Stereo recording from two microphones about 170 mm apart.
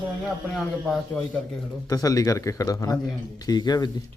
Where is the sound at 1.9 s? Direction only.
20° left (ahead or behind).